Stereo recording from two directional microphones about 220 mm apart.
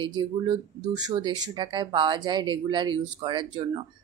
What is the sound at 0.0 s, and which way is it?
Speech, 20° right (ahead or behind).